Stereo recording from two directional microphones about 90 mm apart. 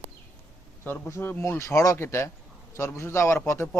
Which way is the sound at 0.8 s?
25° left (ahead or behind).